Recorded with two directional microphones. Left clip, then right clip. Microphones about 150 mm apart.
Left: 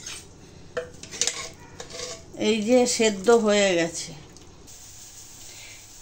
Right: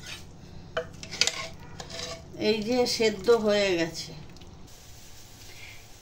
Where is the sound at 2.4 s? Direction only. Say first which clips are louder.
Left 5 dB; 65° left (ahead or behind).